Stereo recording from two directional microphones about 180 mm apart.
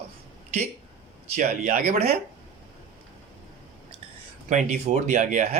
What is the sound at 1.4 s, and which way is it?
Speech, 50° right (ahead or behind).